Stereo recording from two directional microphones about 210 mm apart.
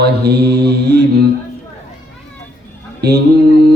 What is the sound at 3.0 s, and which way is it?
Mantra, 50° right (ahead or behind).